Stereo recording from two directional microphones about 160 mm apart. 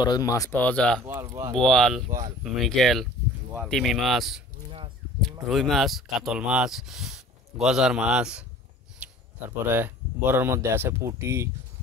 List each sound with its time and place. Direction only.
0.0 s speech: 25° left (ahead or behind)
0.6 s speech: 5° left (ahead or behind)
1.0 s speech: 20° right (ahead or behind)
1.6 s speech: 5° left (ahead or behind)
5.5 s speech: centre (ahead or behind)
9.0 s a sound: 5° right (ahead or behind)
9.7 s speech: 15° right (ahead or behind)